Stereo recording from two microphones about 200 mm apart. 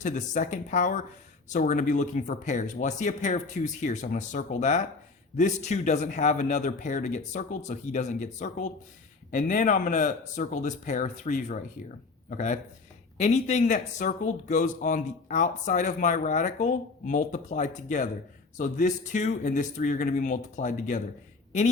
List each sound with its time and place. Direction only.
0.0 s speech: 40° left (ahead or behind)